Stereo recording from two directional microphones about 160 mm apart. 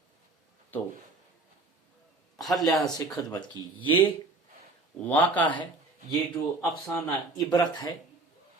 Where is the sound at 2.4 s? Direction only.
Centre (ahead or behind).